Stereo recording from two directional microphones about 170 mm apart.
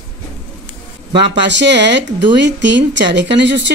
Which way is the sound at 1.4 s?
90° right.